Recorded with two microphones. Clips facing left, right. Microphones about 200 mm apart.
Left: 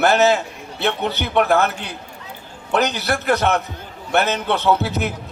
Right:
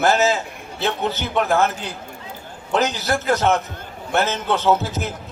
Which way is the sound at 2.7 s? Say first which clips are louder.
Left 1 dB; 60° left (ahead or behind).